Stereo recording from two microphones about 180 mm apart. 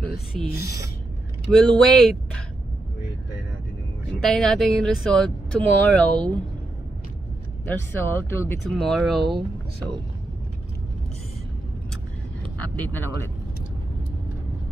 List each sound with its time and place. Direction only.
0.5 s speech: 60° left (ahead or behind)
1.5 s speech: 5° left (ahead or behind)
4.2 s speech: 5° left (ahead or behind)
7.6 s speech: 10° left (ahead or behind)
8.6 s speech: centre (ahead or behind)
12.5 s speech: 10° left (ahead or behind)